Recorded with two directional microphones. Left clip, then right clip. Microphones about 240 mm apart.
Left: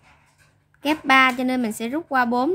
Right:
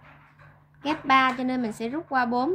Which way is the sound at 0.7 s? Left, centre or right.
Left.